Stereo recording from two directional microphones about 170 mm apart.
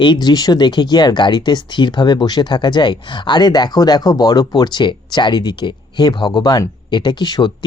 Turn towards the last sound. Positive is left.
turn(degrees=25)  # may be behind; listen again after turning